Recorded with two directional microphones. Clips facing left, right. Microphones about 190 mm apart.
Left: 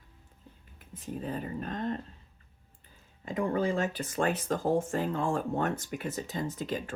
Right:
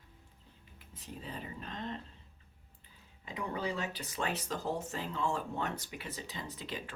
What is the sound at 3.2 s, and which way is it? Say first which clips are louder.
Speech: left 8 dB; 50° left (ahead or behind).